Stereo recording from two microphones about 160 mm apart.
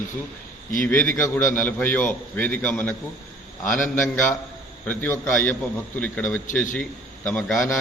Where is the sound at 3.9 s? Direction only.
15° left (ahead or behind).